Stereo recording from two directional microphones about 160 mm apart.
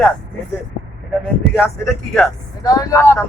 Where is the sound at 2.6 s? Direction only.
20° left (ahead or behind).